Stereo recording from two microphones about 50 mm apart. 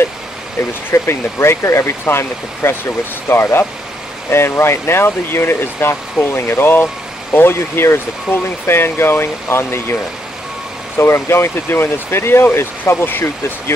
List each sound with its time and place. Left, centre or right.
0.9 s speech: left
11.0 s speech: left